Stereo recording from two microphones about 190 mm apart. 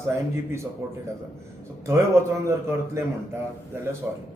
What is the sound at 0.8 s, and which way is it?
Speech, 15° right (ahead or behind).